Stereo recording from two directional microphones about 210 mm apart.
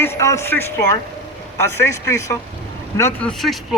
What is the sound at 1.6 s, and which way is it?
A man's voice, 10° left (ahead or behind).